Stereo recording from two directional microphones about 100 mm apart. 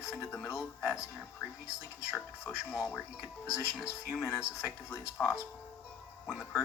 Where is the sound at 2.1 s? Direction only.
25° left (ahead or behind).